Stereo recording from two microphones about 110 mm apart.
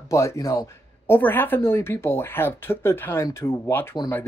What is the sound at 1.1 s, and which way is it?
Speech, 20° left (ahead or behind).